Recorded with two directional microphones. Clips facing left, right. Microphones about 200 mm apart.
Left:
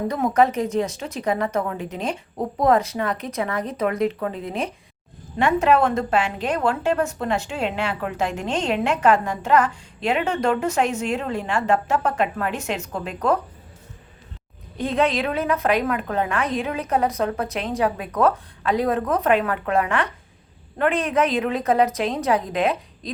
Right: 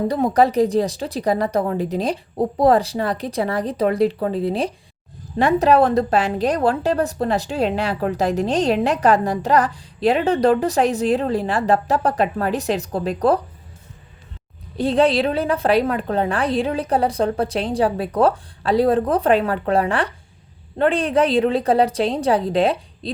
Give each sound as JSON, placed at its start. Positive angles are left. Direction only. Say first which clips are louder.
{"t": 0.1, "sound": "a woman's voice", "louder": "right 1 dB", "side_deg": -35}
{"t": 14.8, "sound": "a woman's voice", "louder": "right 5 dB", "side_deg": -30}